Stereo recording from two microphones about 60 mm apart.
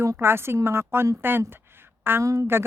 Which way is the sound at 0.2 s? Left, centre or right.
Right.